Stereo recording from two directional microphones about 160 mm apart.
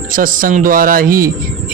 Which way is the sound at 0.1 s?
60° right (ahead or behind).